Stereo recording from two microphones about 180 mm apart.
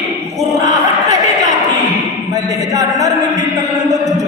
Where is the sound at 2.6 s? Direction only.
20° right (ahead or behind).